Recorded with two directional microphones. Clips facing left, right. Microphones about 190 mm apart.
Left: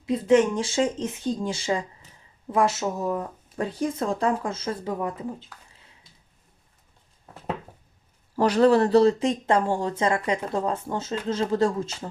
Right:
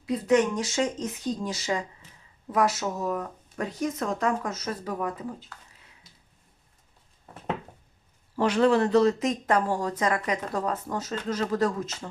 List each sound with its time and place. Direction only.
0.0 s speech: 25° left (ahead or behind)
8.4 s speech: 35° left (ahead or behind)